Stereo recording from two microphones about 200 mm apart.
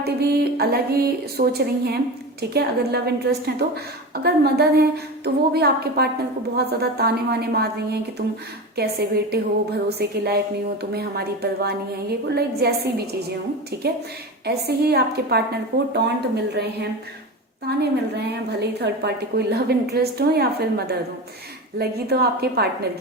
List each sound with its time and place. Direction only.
0.0 s a woman's voice: 50° right (ahead or behind)
8.7 s a woman's voice: 50° right (ahead or behind)
14.4 s a woman's voice: 55° right (ahead or behind)